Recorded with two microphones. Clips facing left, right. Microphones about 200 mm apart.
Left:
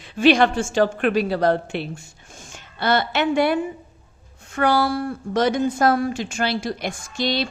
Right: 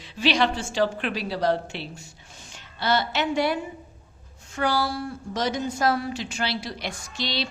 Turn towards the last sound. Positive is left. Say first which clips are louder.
# left 7 dB
turn(degrees=50)  # may be behind; listen again after turning